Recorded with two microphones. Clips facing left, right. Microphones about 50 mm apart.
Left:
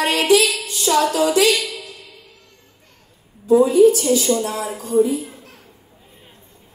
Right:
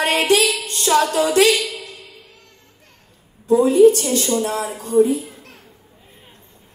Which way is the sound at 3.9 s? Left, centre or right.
Right.